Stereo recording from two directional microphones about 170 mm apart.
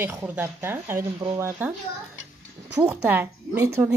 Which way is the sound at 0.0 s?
15° right (ahead or behind).